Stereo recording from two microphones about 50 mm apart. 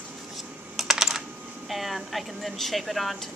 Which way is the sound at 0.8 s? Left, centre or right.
Centre.